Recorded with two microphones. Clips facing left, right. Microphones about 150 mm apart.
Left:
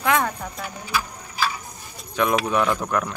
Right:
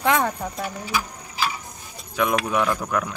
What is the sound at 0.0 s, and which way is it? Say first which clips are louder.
Speech: right 1 dB; 30° right (ahead or behind).